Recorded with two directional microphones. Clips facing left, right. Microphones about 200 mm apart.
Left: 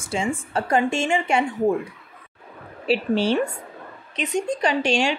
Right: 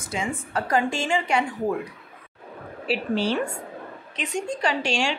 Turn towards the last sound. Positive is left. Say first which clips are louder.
# left 4 dB
turn(degrees=20)  # may be behind; listen again after turning